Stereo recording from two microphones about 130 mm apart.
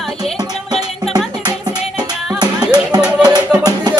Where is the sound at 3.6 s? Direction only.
30° right (ahead or behind).